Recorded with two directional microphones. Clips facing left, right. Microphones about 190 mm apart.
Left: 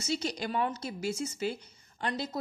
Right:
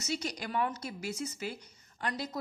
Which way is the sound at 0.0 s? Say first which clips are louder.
Left 3 dB; 30° left (ahead or behind).